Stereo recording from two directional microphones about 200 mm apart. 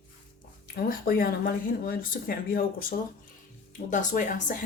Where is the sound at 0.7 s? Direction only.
45° left (ahead or behind).